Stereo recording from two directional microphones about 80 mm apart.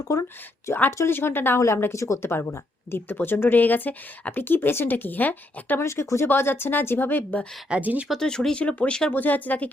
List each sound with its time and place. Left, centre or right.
0.0 s speech: left
0.7 s speech: left
5.8 s speech: left
7.7 s speech: centre
8.0 s speech: centre